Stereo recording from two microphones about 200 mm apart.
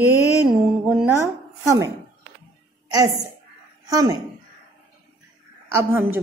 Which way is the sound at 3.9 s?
20° right (ahead or behind).